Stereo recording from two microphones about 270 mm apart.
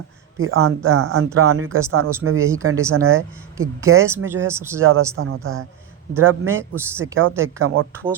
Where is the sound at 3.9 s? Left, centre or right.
Centre.